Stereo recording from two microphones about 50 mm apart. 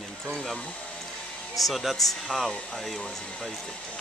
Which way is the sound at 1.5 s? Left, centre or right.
Centre.